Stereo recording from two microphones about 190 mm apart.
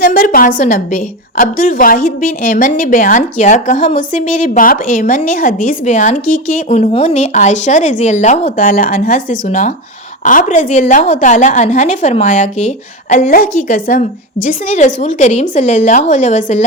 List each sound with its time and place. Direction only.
0.0 s a woman's voice: 50° left (ahead or behind)